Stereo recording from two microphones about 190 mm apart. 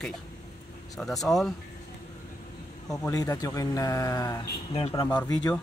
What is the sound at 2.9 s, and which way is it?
Speech, 20° left (ahead or behind).